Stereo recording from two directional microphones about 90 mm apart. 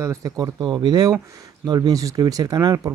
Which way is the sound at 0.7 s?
55° right (ahead or behind).